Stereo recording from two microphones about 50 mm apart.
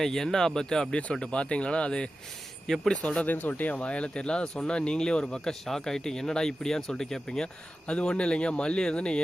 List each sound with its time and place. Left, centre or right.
0.0 s speech: centre
3.2 s speech: left
3.8 s speech: left
5.5 s speech: centre